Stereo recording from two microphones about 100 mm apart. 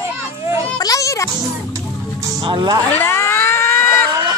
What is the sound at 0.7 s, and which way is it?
Music, 35° left (ahead or behind).